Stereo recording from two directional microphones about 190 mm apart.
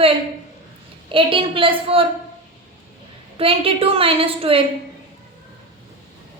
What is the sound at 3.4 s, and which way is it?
A woman's voice, 30° right (ahead or behind).